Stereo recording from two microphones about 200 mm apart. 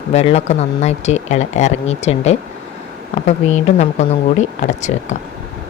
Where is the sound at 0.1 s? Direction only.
30° left (ahead or behind).